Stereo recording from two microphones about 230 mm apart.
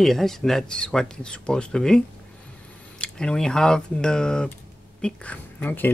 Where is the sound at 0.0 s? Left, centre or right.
Centre.